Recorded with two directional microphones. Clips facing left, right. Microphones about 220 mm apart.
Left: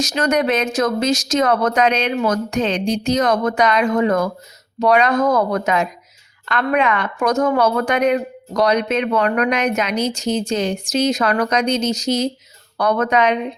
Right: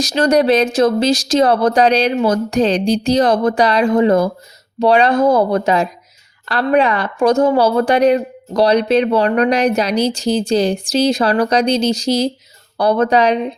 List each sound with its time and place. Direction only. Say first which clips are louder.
0.0 s a woman's voice: right 5 dB; 35° right (ahead or behind)